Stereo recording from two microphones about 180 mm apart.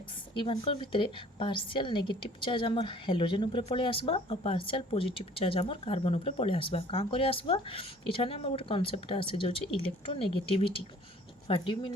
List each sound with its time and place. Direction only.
0.3 s a woman's voice: 30° left (ahead or behind)